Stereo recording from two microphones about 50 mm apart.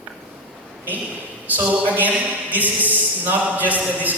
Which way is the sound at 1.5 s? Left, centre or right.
Right.